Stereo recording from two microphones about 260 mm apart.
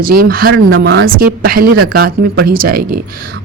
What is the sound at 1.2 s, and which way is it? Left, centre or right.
A woman's voice, right.